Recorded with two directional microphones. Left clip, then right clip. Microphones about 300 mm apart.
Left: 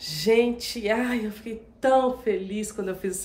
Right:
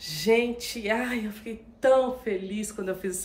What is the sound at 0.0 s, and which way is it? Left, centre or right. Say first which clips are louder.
A woman's voice: left 2 dB; centre.